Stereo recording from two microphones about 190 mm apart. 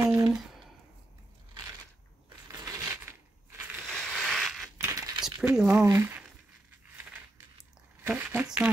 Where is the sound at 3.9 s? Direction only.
5° left (ahead or behind).